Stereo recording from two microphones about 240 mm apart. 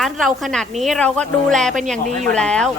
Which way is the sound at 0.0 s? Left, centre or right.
Centre.